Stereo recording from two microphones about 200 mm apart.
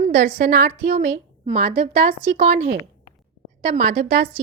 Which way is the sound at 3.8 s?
30° right (ahead or behind).